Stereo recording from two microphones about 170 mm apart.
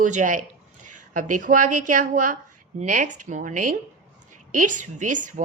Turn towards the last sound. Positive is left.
turn(degrees=-50)  # may be behind; listen again after turning